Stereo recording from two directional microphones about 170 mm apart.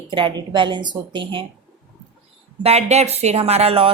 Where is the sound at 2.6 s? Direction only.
40° right (ahead or behind).